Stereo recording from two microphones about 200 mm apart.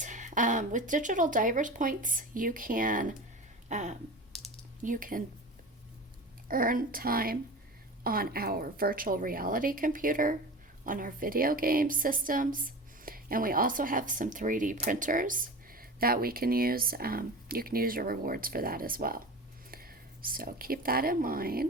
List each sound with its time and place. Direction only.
0.0 s speech: 40° right (ahead or behind)
3.7 s a sound: 35° right (ahead or behind)
4.8 s a woman's voice: 40° right (ahead or behind)
6.5 s a woman's voice: 45° right (ahead or behind)